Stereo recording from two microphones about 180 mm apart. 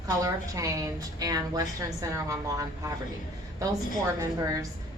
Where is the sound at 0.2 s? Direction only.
20° right (ahead or behind).